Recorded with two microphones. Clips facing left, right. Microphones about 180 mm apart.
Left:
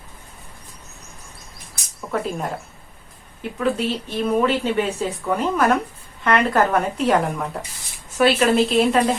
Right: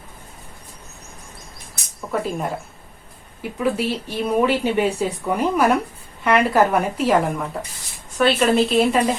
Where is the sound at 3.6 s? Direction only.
10° right (ahead or behind).